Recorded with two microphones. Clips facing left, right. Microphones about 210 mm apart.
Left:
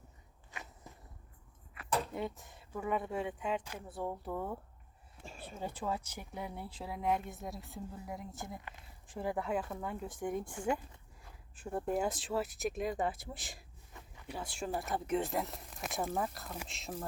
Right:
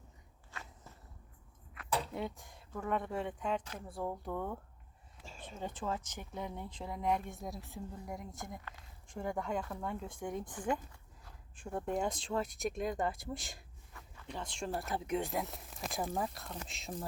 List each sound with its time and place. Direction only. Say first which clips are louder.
0.5 s walk: left 1 dB; 15° left (ahead or behind)
1.7 s speech: left 1 dB; 5° left (ahead or behind)